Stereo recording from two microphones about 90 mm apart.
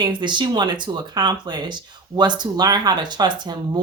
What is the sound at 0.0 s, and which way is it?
Speech, 60° right (ahead or behind).